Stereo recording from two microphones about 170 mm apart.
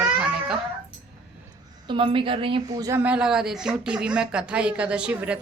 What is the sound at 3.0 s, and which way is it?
Speech, 5° right (ahead or behind).